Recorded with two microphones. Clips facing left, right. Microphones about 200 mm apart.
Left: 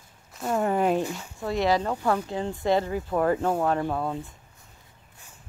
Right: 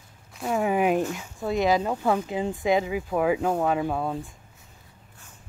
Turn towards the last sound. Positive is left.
turn(degrees=0)  # may be behind; listen again after turning